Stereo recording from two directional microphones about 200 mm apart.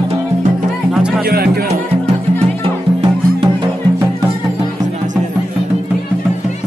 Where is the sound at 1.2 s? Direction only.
50° right (ahead or behind).